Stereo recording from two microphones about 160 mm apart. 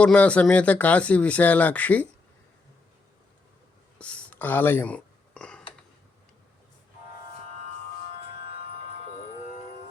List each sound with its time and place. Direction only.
0.0 s speech: 10° left (ahead or behind)
3.9 s a sound: 5° left (ahead or behind)
8.4 s music: 70° left (ahead or behind)